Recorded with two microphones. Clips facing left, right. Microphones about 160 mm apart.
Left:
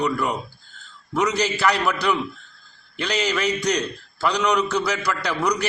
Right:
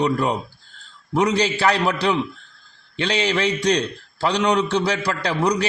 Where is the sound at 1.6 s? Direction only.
30° right (ahead or behind).